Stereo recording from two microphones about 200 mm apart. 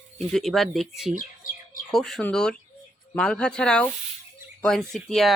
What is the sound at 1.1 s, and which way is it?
Speech, 45° left (ahead or behind).